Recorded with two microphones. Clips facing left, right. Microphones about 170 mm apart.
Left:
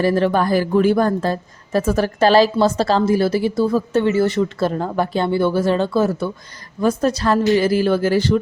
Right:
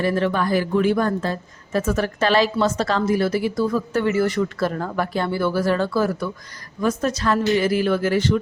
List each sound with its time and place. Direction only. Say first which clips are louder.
0.0 s a woman's voice: left 4 dB; 35° left (ahead or behind)